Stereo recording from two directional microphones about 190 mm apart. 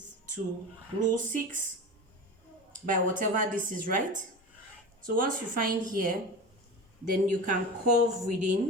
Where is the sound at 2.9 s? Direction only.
45° right (ahead or behind).